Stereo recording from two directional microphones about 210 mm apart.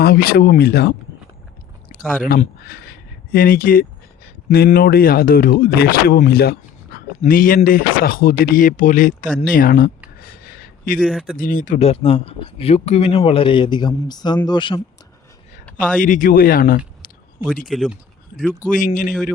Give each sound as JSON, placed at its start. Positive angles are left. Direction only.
{"t": 0.0, "sound": "speech", "side_deg": 45}
{"t": 10.2, "sound": "a sound", "side_deg": 45}
{"t": 11.0, "sound": "speech", "side_deg": 0}
{"t": 11.3, "sound": "speech", "side_deg": 40}
{"t": 16.0, "sound": "speech", "side_deg": 40}
{"t": 17.7, "sound": "speech", "side_deg": 0}
{"t": 18.7, "sound": "speech", "side_deg": 40}